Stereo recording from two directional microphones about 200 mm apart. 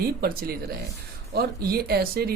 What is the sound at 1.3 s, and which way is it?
Speech, 50° right (ahead or behind).